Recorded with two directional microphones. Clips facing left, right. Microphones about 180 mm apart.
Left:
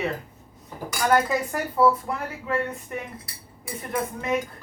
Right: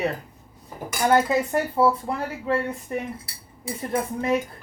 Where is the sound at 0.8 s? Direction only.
25° right (ahead or behind).